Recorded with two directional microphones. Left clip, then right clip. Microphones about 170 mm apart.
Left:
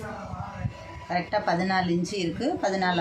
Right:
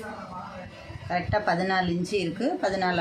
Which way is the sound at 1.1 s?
20° right (ahead or behind).